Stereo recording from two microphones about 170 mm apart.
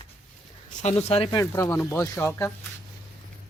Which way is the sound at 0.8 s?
35° left (ahead or behind).